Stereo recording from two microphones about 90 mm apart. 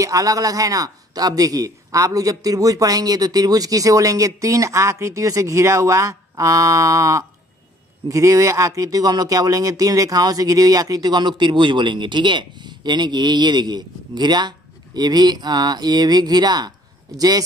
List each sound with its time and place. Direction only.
0.0 s a man's voice: 40° right (ahead or behind)